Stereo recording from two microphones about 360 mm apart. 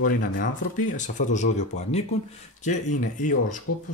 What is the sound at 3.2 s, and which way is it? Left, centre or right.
Speech, left.